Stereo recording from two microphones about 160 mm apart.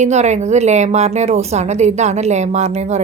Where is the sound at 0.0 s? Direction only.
45° right (ahead or behind).